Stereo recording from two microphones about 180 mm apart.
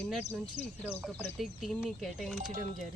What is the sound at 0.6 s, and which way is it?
Speech, 5° right (ahead or behind).